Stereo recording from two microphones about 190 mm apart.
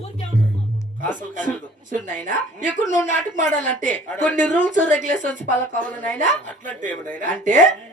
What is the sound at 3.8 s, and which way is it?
Speech, 5° left (ahead or behind).